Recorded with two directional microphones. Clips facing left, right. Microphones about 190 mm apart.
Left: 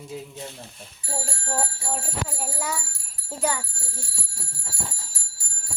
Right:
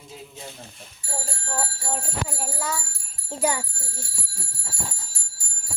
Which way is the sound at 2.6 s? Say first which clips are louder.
Even; 15° left (ahead or behind).